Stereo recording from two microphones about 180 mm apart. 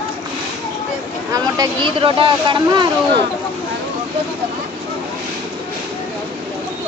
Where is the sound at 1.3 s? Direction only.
25° right (ahead or behind).